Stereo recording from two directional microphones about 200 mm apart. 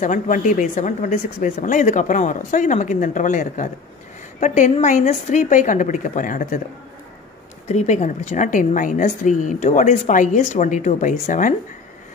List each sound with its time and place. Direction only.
0.0 s a woman's voice: 40° left (ahead or behind)
7.6 s a woman's voice: 35° left (ahead or behind)